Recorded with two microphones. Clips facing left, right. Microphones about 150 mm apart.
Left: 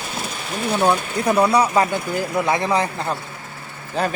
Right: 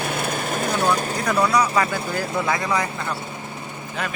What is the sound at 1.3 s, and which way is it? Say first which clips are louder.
Speech: left 4 dB; 30° left (ahead or behind).